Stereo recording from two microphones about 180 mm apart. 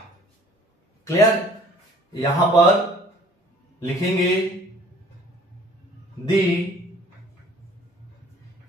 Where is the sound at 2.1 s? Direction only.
15° left (ahead or behind).